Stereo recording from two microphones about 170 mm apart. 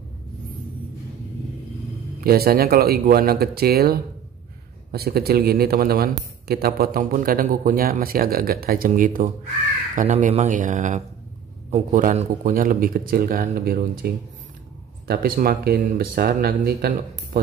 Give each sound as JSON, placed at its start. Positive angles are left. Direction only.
{"t": 2.2, "sound": "speech", "side_deg": -65}